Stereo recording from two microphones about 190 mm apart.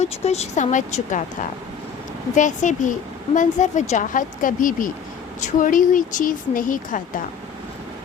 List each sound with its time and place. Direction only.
0.0 s speech: 35° left (ahead or behind)
2.3 s speech: 40° left (ahead or behind)